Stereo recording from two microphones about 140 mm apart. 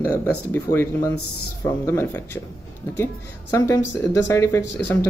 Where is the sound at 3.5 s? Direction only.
25° left (ahead or behind).